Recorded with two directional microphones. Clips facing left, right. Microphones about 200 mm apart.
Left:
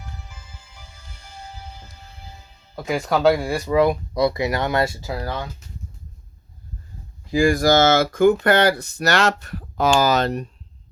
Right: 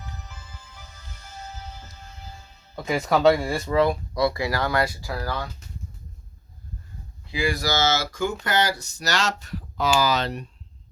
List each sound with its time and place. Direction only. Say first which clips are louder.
2.7 s speech: left 1 dB; centre (ahead or behind)
3.7 s speech: left 4 dB; 15° left (ahead or behind)
7.3 s speech: left 9 dB; 45° left (ahead or behind)